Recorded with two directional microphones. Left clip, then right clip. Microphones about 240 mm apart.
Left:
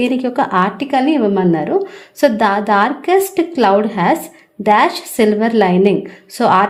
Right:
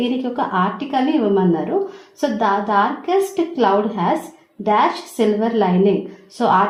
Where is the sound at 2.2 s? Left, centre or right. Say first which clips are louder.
Left 5 dB; left.